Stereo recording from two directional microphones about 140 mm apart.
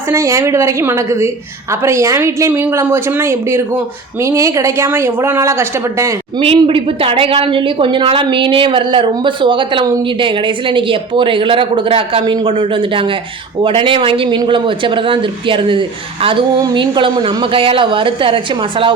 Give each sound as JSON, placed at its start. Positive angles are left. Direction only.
{"t": 0.1, "sound": "a woman's voice", "side_deg": -20}
{"t": 6.4, "sound": "speech", "side_deg": -40}